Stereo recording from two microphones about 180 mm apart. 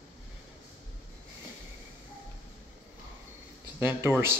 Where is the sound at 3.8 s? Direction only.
10° right (ahead or behind).